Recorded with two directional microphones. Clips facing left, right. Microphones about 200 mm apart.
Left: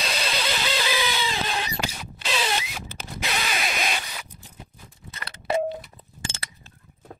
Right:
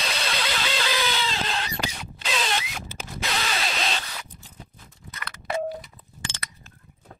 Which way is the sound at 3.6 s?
15° left (ahead or behind).